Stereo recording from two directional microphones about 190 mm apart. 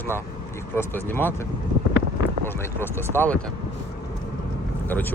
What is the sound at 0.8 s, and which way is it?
Speech, 10° left (ahead or behind).